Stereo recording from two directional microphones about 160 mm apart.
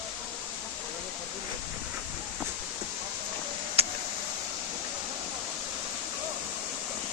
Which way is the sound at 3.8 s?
40° right (ahead or behind).